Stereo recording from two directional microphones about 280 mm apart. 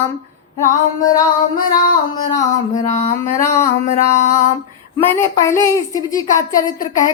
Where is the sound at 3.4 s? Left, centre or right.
Centre.